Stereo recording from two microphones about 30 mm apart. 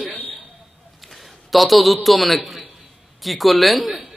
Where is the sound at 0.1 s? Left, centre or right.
Left.